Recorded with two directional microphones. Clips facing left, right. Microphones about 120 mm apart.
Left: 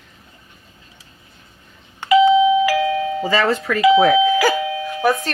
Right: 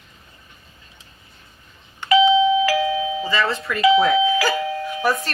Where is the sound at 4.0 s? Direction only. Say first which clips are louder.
Left 4 dB; 60° left (ahead or behind).